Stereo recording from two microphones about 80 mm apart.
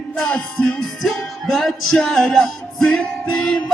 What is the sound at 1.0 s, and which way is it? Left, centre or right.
Music, centre.